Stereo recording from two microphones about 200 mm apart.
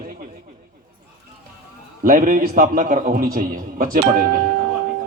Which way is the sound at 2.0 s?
45° right (ahead or behind).